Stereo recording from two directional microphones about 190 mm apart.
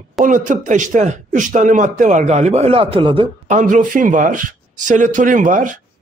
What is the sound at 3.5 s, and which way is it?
A woman's voice, 40° right (ahead or behind).